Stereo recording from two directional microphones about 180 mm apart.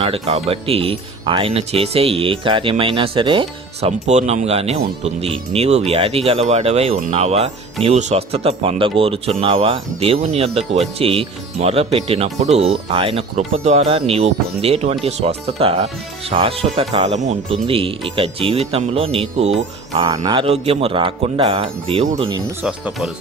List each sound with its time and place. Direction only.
0.0 s speech: 35° right (ahead or behind)
19.9 s a man's voice: 20° right (ahead or behind)
22.6 s speech: 5° right (ahead or behind)